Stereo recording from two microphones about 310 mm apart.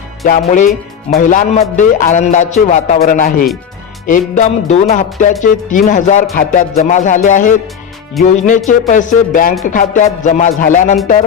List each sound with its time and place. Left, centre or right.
0.3 s speech: left